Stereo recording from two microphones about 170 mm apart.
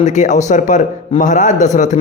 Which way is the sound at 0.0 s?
45° left (ahead or behind).